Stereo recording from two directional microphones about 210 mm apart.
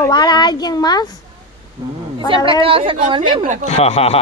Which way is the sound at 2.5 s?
25° right (ahead or behind).